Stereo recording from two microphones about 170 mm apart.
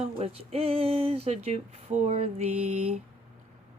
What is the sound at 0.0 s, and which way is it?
Speech, 35° right (ahead or behind).